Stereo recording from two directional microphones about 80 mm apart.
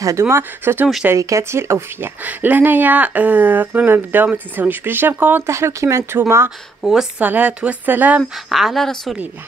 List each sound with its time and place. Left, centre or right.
0.2 s speech: right
2.2 s speech: right
5.5 s speech: right
7.2 s speech: centre
8.5 s a woman's voice: centre